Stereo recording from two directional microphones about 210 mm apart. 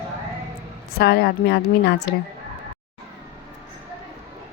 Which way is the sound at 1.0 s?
50° left (ahead or behind).